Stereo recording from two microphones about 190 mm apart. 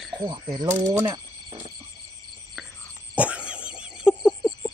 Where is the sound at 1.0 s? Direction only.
20° right (ahead or behind).